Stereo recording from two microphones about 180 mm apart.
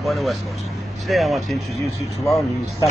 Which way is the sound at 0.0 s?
Centre (ahead or behind).